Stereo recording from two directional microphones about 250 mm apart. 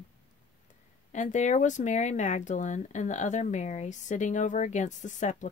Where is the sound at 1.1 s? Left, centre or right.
Left.